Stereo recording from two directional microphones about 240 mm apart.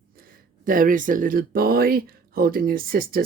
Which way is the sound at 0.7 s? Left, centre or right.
Right.